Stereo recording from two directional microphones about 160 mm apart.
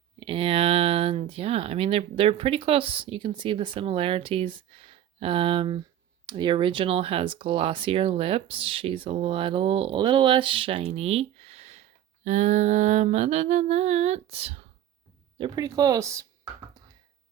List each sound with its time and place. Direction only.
0.2 s speech: 35° right (ahead or behind)
15.4 s speech: 25° right (ahead or behind)